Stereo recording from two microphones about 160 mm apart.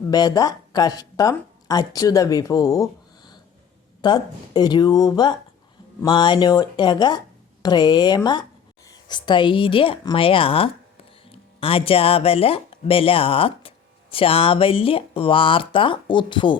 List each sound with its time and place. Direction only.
0.1 s speech: 25° left (ahead or behind)